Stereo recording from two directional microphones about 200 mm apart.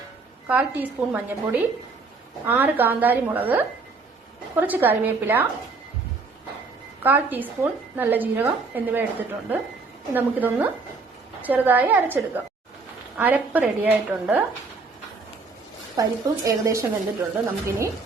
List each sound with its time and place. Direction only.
0.4 s a woman's voice: 5° right (ahead or behind)
7.0 s a woman's voice: 10° right (ahead or behind)
16.0 s a woman's voice: 15° right (ahead or behind)